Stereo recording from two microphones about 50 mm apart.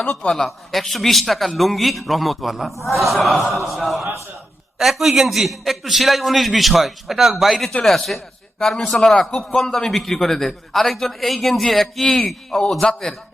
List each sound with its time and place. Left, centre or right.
0.3 s a man's voice: centre